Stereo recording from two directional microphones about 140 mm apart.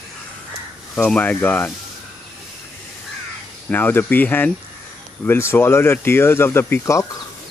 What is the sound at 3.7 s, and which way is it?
Speech, 15° left (ahead or behind).